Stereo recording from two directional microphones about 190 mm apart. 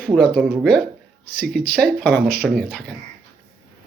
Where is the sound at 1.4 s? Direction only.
50° right (ahead or behind).